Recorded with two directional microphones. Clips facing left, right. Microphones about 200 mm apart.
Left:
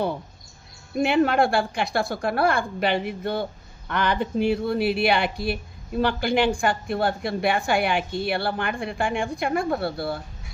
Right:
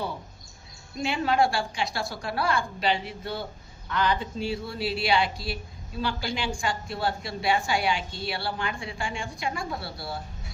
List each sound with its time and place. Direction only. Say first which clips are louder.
0.9 s speech: left 5 dB; 60° left (ahead or behind)